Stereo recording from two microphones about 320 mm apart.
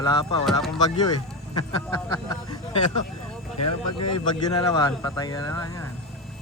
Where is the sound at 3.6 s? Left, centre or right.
Left.